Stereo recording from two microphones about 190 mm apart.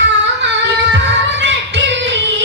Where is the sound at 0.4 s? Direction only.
70° right (ahead or behind).